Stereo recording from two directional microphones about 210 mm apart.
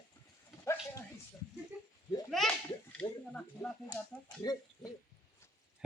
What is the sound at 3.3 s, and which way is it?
Speech, 5° left (ahead or behind).